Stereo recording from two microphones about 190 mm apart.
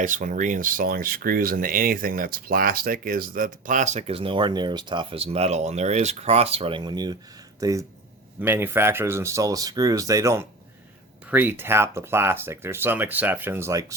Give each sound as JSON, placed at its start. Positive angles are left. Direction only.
{"t": 0.0, "sound": "speech", "side_deg": -45}